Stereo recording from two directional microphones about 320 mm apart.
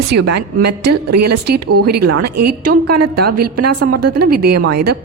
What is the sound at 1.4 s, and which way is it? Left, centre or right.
Speech, right.